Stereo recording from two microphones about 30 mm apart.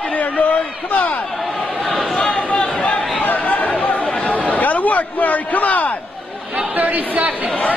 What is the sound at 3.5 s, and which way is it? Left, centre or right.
Chatter, left.